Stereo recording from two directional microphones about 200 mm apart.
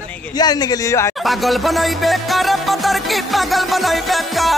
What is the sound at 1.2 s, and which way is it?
Music, centre (ahead or behind).